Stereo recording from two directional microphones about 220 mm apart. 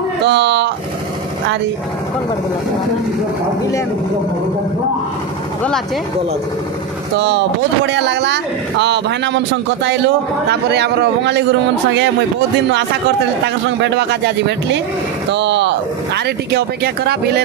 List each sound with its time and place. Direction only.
0.2 s speech: 50° right (ahead or behind)
7.2 s speech: 55° right (ahead or behind)
13.8 s speech: 50° right (ahead or behind)
15.3 s speech: 55° right (ahead or behind)